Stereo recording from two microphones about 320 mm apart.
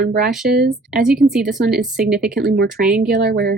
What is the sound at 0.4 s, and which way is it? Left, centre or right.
Speech, right.